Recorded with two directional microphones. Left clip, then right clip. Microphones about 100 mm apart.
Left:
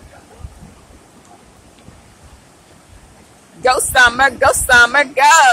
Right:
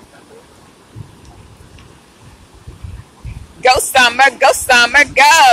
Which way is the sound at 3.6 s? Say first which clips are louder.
Right 1 dB; 15° left (ahead or behind).